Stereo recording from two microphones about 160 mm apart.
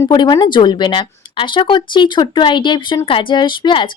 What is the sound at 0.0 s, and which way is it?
A woman's voice, 30° left (ahead or behind).